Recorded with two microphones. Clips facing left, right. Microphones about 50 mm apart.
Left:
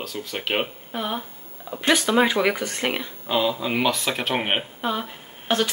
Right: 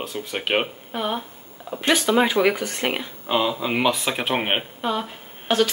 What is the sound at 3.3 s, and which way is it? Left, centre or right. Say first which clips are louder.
Speech: right 1 dB; centre.